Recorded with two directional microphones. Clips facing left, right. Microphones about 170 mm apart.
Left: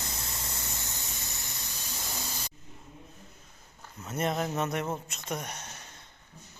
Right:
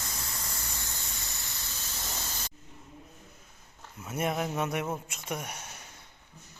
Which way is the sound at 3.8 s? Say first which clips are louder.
Even; 10° right (ahead or behind).